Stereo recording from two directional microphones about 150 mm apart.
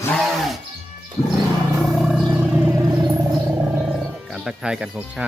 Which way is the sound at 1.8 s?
Centre (ahead or behind).